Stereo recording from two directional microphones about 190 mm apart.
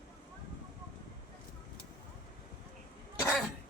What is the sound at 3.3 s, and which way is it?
Throat clearing, centre (ahead or behind).